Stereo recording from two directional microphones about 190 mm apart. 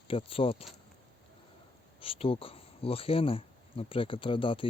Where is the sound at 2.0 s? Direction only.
30° left (ahead or behind).